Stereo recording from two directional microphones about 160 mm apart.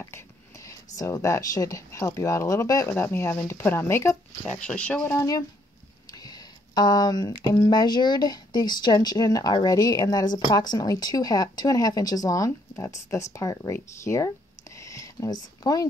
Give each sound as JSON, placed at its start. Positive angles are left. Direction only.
{"t": 0.7, "sound": "speech", "side_deg": 20}
{"t": 14.9, "sound": "a sound", "side_deg": 20}
{"t": 15.6, "sound": "speech", "side_deg": 25}